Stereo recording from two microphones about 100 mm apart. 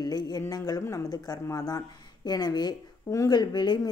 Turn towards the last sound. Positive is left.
turn(degrees=45)  # may be behind; listen again after turning